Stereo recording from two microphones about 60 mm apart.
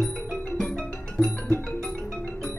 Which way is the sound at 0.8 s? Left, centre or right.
Left.